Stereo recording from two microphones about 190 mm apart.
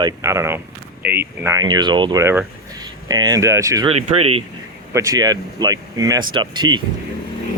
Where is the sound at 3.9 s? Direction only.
30° right (ahead or behind).